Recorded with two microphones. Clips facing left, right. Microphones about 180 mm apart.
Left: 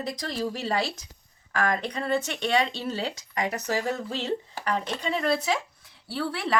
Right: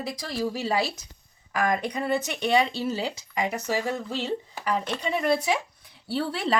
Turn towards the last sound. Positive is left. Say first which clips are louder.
# right 2 dB
turn(degrees=-25)  # may be behind; listen again after turning